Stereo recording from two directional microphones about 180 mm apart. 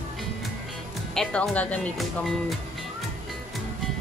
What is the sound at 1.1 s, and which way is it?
Speech, 5° left (ahead or behind).